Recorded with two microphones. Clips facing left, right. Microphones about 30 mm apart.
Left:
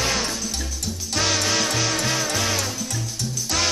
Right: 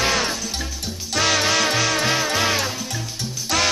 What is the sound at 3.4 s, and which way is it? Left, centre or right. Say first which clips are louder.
Music: right 4 dB; centre.